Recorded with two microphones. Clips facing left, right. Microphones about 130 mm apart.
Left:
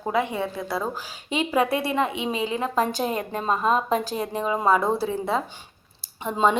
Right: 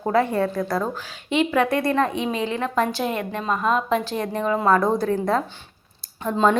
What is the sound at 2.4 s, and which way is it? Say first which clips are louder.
Speech: right 1 dB; 20° left (ahead or behind).